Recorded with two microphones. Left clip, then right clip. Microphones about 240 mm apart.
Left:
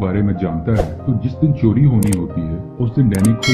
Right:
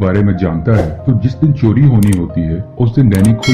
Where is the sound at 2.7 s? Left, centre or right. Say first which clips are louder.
Right 5 dB; right.